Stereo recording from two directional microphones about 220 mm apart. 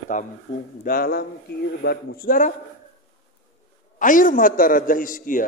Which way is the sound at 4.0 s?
35° left (ahead or behind).